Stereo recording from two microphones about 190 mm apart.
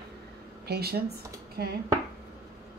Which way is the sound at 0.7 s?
55° right (ahead or behind).